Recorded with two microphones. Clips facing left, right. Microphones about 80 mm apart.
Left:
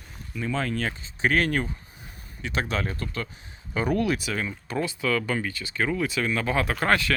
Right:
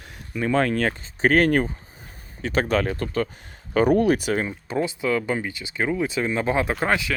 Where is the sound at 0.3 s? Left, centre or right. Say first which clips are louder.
Right 7 dB; right.